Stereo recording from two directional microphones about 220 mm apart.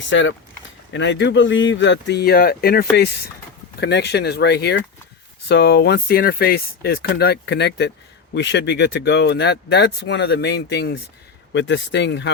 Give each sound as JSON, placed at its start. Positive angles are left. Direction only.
{"t": 0.1, "sound": "speech", "side_deg": 55}